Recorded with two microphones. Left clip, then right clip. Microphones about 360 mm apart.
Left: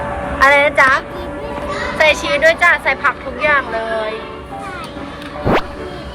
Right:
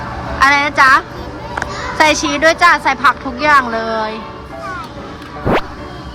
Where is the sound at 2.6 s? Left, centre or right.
Centre.